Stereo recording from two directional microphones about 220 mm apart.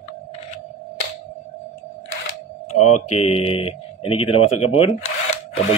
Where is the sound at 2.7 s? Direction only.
90° left.